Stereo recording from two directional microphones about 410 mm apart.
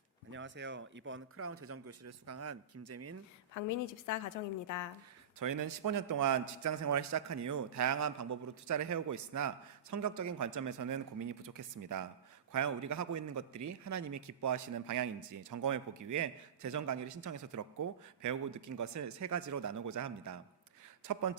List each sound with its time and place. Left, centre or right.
0.3 s speech: right
3.5 s a woman's voice: left
5.4 s a man's voice: right
21.1 s a man's voice: right